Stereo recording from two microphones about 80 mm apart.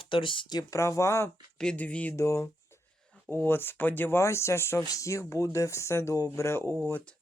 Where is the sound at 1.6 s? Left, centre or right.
Centre.